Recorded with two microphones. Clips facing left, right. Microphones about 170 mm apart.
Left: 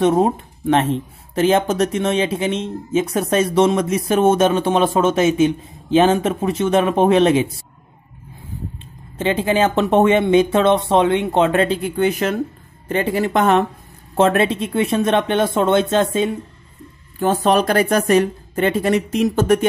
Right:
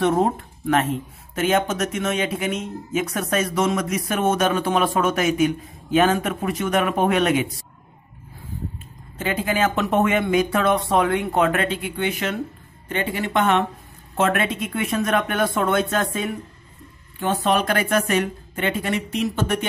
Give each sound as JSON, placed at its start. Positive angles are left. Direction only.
{"t": 0.0, "sound": "speech", "side_deg": 20}
{"t": 9.2, "sound": "a woman's voice", "side_deg": 30}
{"t": 17.2, "sound": "a woman's voice", "side_deg": 40}